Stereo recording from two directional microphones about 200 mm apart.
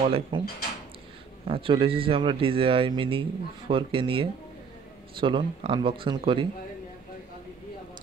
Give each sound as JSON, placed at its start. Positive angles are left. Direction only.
{"t": 0.0, "sound": "speech", "side_deg": -30}
{"t": 1.5, "sound": "speech", "side_deg": -25}